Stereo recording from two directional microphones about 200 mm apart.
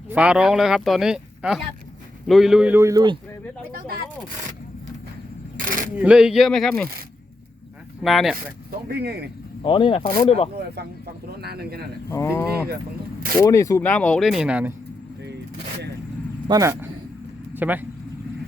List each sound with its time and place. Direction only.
0.1 s a man's voice: 5° right (ahead or behind)
5.5 s a sound: 45° right (ahead or behind)
5.9 s speech: 5° right (ahead or behind)
8.0 s speech: centre (ahead or behind)
8.9 s speech: 55° right (ahead or behind)
9.6 s speech: 25° left (ahead or behind)
11.3 s speech: 50° right (ahead or behind)
12.1 s speech: 15° left (ahead or behind); by 14.7 s 5° right (ahead or behind)
16.5 s a man's voice: 15° right (ahead or behind)